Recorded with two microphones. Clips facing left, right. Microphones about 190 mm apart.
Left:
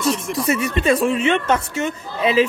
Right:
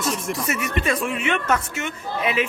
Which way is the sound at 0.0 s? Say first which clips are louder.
Left 5 dB; 30° left (ahead or behind).